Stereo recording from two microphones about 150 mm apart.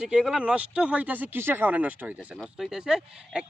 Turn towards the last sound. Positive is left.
turn(degrees=-5)  # may be behind; listen again after turning